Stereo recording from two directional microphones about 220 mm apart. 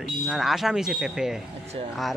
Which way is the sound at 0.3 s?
Centre (ahead or behind).